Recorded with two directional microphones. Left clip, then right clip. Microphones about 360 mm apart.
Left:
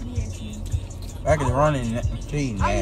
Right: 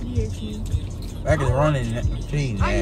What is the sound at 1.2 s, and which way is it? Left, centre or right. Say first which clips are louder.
Speech: left 1 dB; centre.